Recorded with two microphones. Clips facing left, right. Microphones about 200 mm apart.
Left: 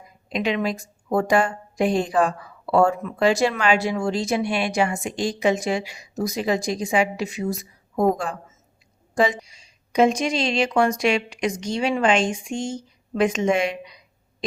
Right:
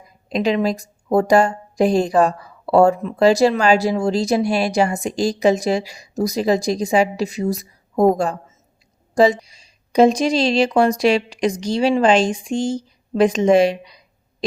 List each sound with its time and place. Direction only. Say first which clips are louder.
0.3 s a woman's voice: right 5 dB; 35° right (ahead or behind)